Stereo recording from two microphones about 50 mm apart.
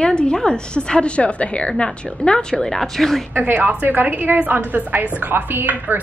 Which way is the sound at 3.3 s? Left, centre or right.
Right.